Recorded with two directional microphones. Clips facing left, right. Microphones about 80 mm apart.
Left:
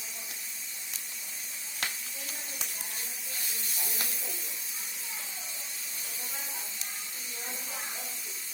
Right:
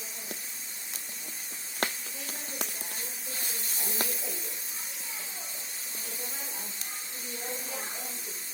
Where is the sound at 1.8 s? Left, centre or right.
Right.